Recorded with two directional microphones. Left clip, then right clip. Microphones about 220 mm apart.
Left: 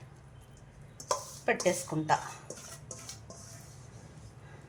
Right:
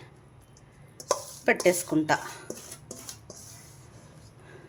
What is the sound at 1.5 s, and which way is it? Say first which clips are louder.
Speech: right 6 dB; 50° right (ahead or behind).